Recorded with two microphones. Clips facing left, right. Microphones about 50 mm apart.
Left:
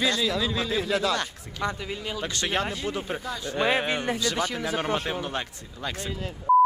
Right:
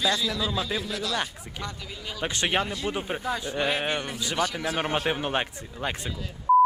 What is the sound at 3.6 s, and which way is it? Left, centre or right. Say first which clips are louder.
Speech: left 4 dB; left.